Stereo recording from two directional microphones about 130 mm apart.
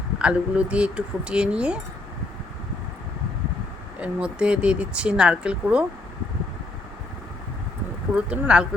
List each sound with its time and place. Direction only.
0.2 s speech: 10° right (ahead or behind)
4.0 s speech: 10° right (ahead or behind)
8.1 s speech: 5° right (ahead or behind)